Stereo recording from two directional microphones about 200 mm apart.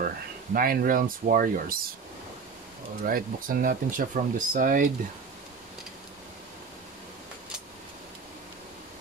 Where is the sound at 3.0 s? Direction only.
45° right (ahead or behind).